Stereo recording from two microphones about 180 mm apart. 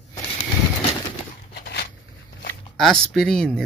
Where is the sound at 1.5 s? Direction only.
65° left (ahead or behind).